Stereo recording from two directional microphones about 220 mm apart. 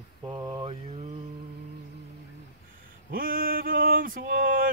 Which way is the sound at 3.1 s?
40° right (ahead or behind).